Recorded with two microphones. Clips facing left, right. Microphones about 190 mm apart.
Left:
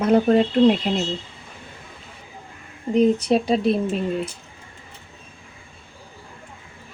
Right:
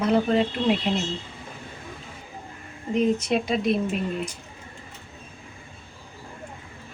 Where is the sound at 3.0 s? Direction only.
35° left (ahead or behind).